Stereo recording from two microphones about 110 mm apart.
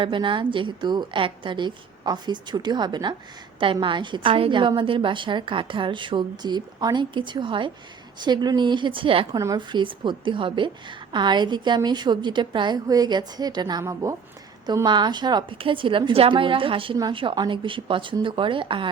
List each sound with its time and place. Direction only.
0.0 s a woman's voice: 50° right (ahead or behind); by 14.2 s 30° right (ahead or behind)
14.8 s a woman's voice: 45° right (ahead or behind)